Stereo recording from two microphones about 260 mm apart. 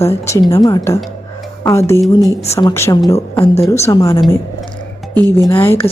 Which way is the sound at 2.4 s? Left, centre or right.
Centre.